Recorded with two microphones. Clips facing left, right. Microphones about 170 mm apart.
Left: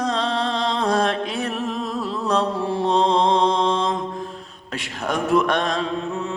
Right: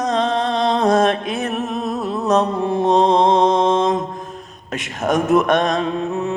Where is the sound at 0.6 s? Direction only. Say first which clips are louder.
Right 6 dB; 45° right (ahead or behind).